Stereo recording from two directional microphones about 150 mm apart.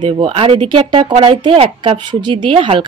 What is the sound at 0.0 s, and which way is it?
A woman's voice, 35° right (ahead or behind).